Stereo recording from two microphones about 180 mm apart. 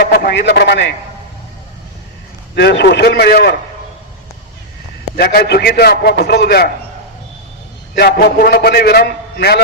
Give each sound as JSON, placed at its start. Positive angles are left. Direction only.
{"t": 0.1, "sound": "speech", "side_deg": 65}
{"t": 2.6, "sound": "a man's voice", "side_deg": 70}
{"t": 5.1, "sound": "a man's voice", "side_deg": 60}
{"t": 7.9, "sound": "a man's voice", "side_deg": 60}